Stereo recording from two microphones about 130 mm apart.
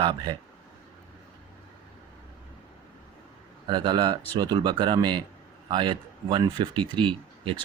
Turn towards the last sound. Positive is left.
turn(degrees=-40)  # may be behind; listen again after turning